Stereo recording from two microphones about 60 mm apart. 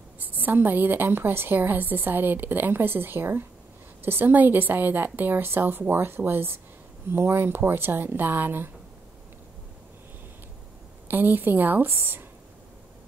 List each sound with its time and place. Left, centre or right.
0.2 s a woman's voice: right
11.1 s a woman's voice: right